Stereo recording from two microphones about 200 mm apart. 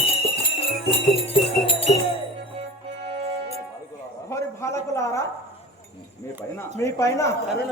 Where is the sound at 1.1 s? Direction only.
25° left (ahead or behind).